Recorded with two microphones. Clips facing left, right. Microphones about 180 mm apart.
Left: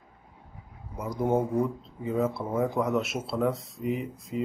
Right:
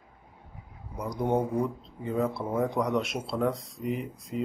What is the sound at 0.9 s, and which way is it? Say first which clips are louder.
Speech: left 1 dB; 5° left (ahead or behind).